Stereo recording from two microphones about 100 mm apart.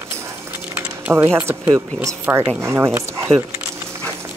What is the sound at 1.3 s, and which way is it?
Speech, 20° right (ahead or behind).